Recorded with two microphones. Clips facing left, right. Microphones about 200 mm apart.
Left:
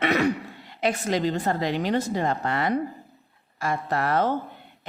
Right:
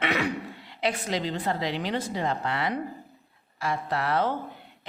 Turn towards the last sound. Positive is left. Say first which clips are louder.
# left 3 dB
turn(degrees=45)  # may be behind; listen again after turning